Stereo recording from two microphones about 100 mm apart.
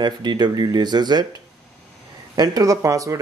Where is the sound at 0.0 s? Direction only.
45° right (ahead or behind).